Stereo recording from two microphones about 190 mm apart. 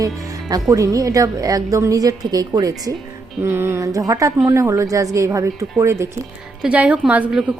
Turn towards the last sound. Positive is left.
turn(degrees=-5)  # may be behind; listen again after turning